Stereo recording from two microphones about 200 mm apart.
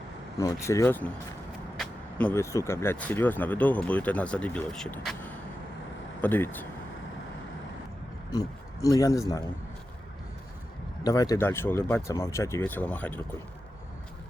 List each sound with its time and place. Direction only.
0.3 s speech: 15° left (ahead or behind)
8.3 s a man's voice: 15° left (ahead or behind)
11.0 s speech: 15° left (ahead or behind)